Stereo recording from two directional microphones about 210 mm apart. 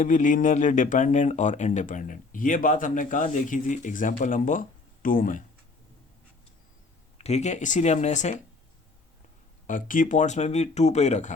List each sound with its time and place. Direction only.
0.0 s speech: 40° left (ahead or behind)
7.2 s speech: 30° left (ahead or behind)
9.6 s speech: 40° left (ahead or behind)